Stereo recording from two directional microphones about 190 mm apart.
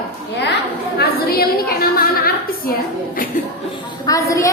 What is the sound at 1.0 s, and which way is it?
A woman's voice, 55° left (ahead or behind).